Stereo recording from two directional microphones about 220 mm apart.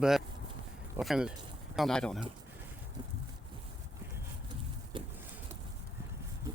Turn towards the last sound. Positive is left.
turn(degrees=-20)  # may be behind; listen again after turning